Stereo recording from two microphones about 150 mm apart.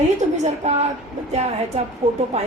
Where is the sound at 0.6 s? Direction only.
50° right (ahead or behind).